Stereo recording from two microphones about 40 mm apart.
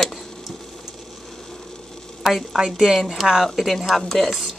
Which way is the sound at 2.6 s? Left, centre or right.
Centre.